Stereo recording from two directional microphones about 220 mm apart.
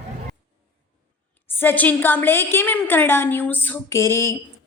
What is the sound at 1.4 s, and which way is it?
A woman's voice, 10° left (ahead or behind).